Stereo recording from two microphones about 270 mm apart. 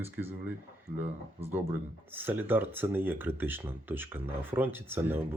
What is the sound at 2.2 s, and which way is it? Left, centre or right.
Speech, centre.